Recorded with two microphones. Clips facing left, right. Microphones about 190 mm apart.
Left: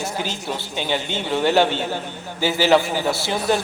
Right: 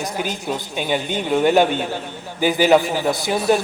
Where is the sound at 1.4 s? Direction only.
15° right (ahead or behind).